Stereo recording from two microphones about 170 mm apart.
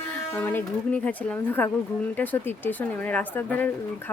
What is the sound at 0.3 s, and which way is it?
Speech, 10° left (ahead or behind).